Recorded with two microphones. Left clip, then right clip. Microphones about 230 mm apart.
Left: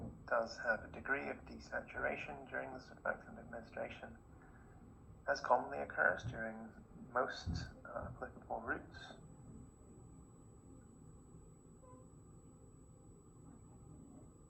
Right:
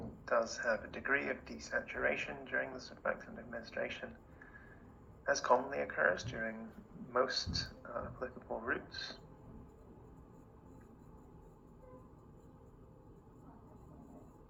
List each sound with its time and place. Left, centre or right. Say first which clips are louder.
0.3 s speech: right 3 dB; right
5.2 s a man's voice: right 3 dB; right